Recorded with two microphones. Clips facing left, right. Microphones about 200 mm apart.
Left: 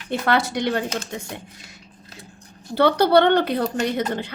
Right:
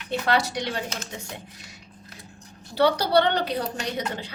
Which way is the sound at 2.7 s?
55° left (ahead or behind).